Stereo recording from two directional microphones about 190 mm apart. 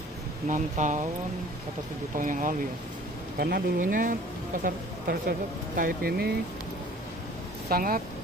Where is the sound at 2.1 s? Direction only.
45° right (ahead or behind).